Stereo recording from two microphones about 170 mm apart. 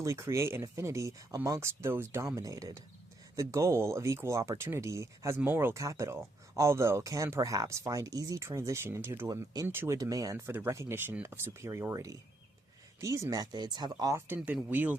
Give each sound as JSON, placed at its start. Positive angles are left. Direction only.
{"t": 0.0, "sound": "speech", "side_deg": -15}
{"t": 14.3, "sound": "speech", "side_deg": -10}